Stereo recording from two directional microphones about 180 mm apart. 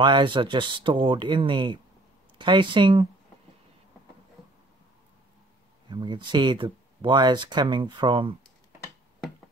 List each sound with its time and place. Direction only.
0.0 s speech: 25° right (ahead or behind)
5.9 s speech: 25° right (ahead or behind)